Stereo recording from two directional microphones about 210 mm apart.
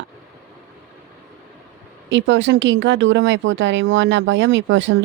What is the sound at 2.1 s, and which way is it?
Speech, 60° right (ahead or behind).